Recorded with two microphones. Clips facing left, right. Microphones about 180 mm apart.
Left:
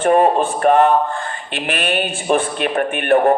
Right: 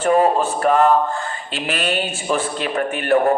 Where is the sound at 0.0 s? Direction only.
55° left (ahead or behind).